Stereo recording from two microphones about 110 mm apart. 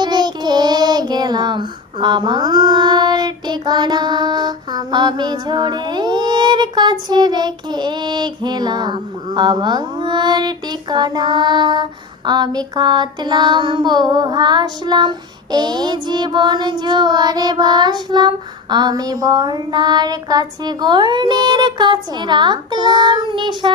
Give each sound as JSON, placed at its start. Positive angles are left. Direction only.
{"t": 0.0, "sound": "child singing", "side_deg": -40}